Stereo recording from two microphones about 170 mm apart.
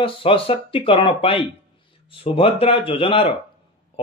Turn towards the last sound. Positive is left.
turn(degrees=30)  # may be behind; listen again after turning